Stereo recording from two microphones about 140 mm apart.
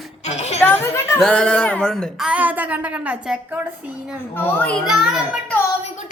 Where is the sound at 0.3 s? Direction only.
50° left (ahead or behind).